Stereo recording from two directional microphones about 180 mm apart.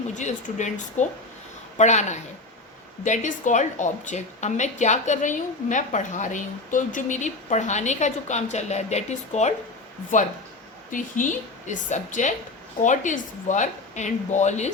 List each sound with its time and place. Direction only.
0.1 s a woman's voice: 40° left (ahead or behind)
10.9 s speech: 45° left (ahead or behind)